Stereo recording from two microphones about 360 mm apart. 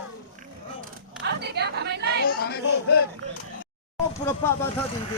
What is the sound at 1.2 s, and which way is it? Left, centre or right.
Chatter, right.